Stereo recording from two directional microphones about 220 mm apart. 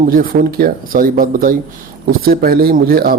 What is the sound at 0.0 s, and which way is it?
A man's voice, 40° right (ahead or behind).